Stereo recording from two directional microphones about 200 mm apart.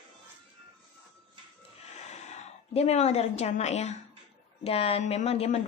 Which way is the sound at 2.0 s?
35° left (ahead or behind).